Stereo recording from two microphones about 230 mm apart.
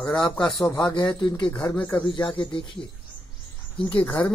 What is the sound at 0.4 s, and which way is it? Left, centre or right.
Speech, centre.